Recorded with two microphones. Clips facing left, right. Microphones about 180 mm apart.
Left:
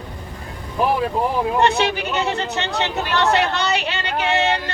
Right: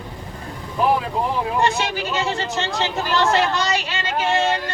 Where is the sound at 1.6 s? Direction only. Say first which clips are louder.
Left 4 dB; 60° left (ahead or behind).